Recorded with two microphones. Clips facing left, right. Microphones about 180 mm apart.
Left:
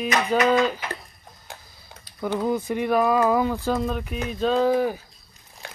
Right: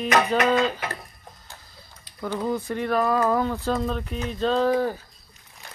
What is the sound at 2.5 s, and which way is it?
Speech, 15° left (ahead or behind).